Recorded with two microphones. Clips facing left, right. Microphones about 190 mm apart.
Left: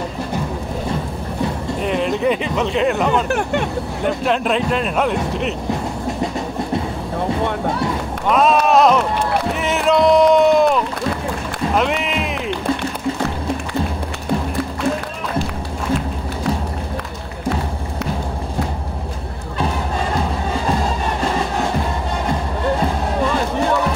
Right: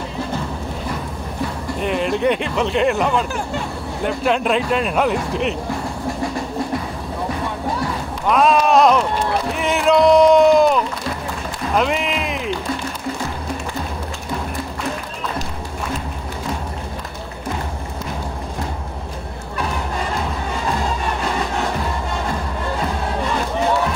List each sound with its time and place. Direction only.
1.8 s speech: centre (ahead or behind)
3.3 s speech: 70° left (ahead or behind)
4.0 s speech: centre (ahead or behind)
8.3 s a sound: centre (ahead or behind)
11.7 s run: centre (ahead or behind)